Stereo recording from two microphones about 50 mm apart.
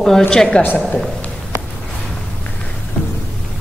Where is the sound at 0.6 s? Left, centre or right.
Left.